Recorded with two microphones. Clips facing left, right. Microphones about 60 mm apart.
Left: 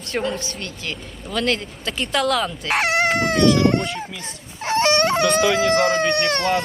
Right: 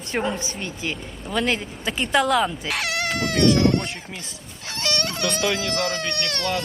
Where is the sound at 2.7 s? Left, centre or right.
Left.